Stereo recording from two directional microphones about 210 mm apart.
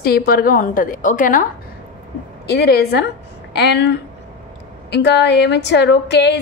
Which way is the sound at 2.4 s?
50° left (ahead or behind).